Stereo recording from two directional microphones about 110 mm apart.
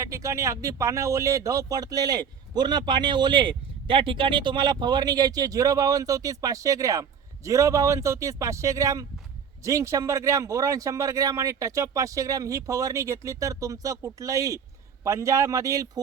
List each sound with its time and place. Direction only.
0.0 s speech: 30° right (ahead or behind)